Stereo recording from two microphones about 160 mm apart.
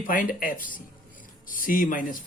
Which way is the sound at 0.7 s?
60° left (ahead or behind).